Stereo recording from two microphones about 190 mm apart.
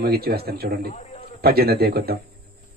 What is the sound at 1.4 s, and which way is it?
Speech, 55° right (ahead or behind).